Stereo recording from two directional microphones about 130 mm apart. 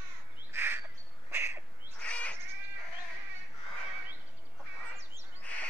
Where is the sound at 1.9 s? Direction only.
10° left (ahead or behind).